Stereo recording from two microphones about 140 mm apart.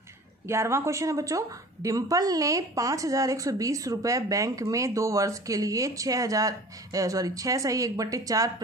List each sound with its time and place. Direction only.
0.5 s speech: 20° right (ahead or behind)